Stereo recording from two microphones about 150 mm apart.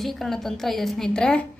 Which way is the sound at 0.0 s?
Centre (ahead or behind).